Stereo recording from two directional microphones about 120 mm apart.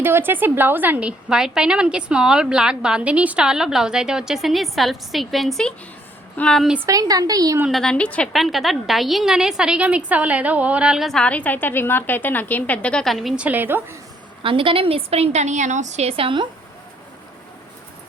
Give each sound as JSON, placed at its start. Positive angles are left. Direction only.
{"t": 0.0, "sound": "a woman's voice", "side_deg": -15}
{"t": 6.8, "sound": "speech", "side_deg": -30}
{"t": 7.7, "sound": "a woman's voice", "side_deg": 5}
{"t": 8.3, "sound": "a woman's voice", "side_deg": 0}
{"t": 14.4, "sound": "a woman's voice", "side_deg": -45}